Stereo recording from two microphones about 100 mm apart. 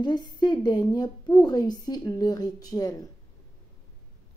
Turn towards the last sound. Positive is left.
turn(degrees=35)  # may be behind; listen again after turning